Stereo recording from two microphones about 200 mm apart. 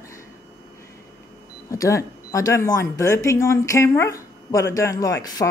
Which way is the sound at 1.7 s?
15° left (ahead or behind).